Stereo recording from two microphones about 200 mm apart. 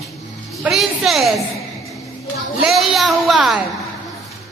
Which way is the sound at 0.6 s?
Centre (ahead or behind).